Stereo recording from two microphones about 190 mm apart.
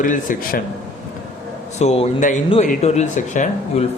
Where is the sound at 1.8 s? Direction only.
35° left (ahead or behind).